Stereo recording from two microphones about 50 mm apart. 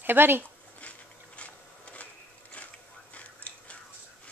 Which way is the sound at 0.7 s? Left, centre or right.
Left.